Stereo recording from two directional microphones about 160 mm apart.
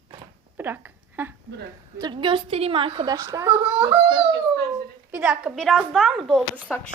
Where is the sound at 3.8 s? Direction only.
30° right (ahead or behind).